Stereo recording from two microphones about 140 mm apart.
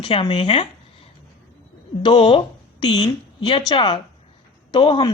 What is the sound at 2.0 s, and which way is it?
A woman's voice, 35° left (ahead or behind).